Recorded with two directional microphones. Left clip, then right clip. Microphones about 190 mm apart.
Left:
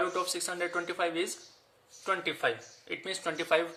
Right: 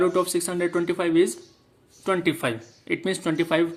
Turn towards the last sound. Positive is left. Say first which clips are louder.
# right 5 dB
turn(degrees=-25)  # may be behind; listen again after turning